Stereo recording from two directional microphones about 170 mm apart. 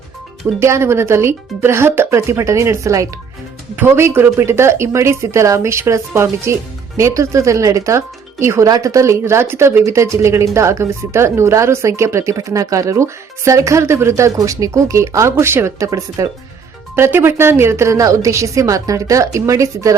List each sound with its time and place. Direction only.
0.6 s speech: 15° right (ahead or behind)